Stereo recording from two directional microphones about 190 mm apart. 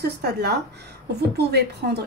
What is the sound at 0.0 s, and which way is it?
A woman's voice, 60° right (ahead or behind).